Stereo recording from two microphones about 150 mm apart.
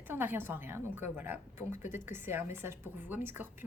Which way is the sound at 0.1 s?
15° right (ahead or behind).